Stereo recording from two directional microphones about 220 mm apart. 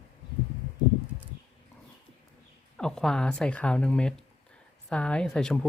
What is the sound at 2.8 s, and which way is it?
Speech, 5° left (ahead or behind).